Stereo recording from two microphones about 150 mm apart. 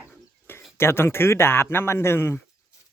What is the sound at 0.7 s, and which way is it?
Speech, 15° left (ahead or behind).